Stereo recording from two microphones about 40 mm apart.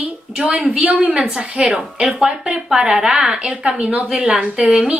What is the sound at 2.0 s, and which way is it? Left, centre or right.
A woman's voice, centre.